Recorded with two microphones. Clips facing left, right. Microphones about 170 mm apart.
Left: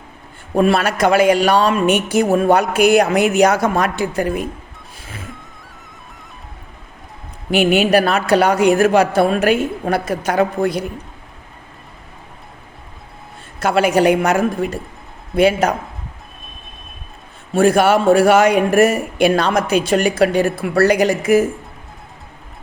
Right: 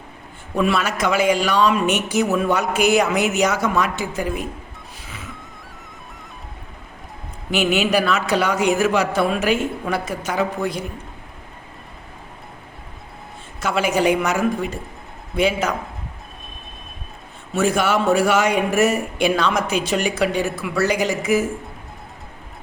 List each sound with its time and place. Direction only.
0.5 s speech: 50° left (ahead or behind)
7.5 s speech: 55° left (ahead or behind)
13.6 s speech: 60° left (ahead or behind)
17.5 s speech: 60° left (ahead or behind)